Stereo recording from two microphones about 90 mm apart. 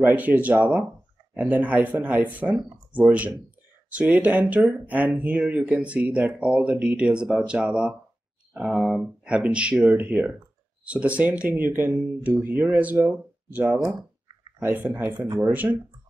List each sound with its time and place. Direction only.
0.1 s speech: 15° right (ahead or behind)
15.1 s speech: 55° right (ahead or behind)
15.5 s speech: 20° right (ahead or behind)